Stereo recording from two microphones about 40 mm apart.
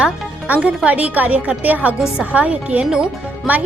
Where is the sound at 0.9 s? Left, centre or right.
Right.